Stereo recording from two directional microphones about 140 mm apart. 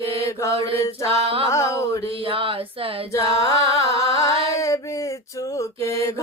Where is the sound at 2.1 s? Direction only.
40° right (ahead or behind).